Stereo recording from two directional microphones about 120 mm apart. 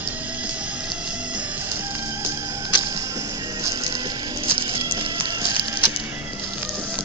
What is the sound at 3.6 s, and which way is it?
Music, 30° right (ahead or behind).